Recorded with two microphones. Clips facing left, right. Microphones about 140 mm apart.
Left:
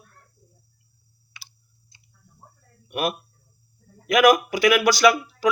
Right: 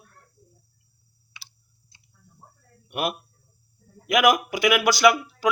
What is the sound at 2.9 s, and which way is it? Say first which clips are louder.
Speech: left 2 dB; 20° right (ahead or behind).